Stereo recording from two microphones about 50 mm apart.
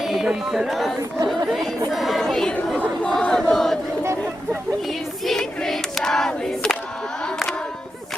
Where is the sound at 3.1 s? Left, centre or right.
Centre.